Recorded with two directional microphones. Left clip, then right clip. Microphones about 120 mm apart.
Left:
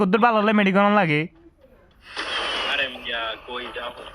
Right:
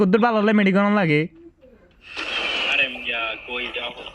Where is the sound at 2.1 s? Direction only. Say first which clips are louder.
Right 1 dB; 25° left (ahead or behind).